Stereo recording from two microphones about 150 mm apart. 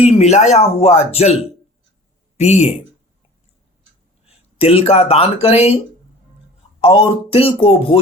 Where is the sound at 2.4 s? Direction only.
45° left (ahead or behind).